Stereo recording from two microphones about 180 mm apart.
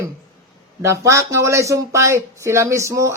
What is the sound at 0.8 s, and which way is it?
Speech, 15° right (ahead or behind).